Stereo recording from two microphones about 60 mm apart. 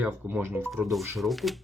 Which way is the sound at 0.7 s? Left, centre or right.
Centre.